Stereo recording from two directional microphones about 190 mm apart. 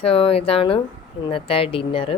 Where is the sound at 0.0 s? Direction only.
30° left (ahead or behind).